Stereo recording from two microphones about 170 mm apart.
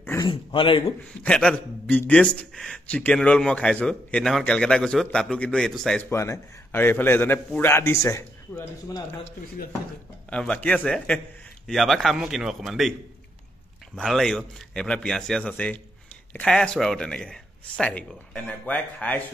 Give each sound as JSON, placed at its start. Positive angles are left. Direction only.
{"t": 0.0, "sound": "dog", "side_deg": 15}
{"t": 0.3, "sound": "speech", "side_deg": 30}
{"t": 1.2, "sound": "a man's voice", "side_deg": 5}
{"t": 6.0, "sound": "a man's voice", "side_deg": 15}
{"t": 10.3, "sound": "a man's voice", "side_deg": 5}
{"t": 13.9, "sound": "a man's voice", "side_deg": 0}